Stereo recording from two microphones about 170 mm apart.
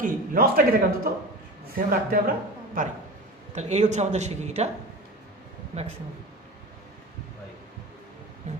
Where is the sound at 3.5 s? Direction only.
40° right (ahead or behind).